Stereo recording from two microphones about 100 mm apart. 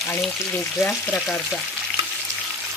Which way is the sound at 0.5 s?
15° left (ahead or behind).